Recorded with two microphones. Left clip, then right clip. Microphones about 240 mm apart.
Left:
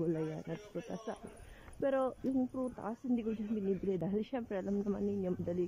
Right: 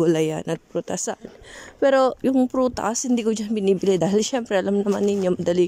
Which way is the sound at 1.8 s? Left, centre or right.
Right.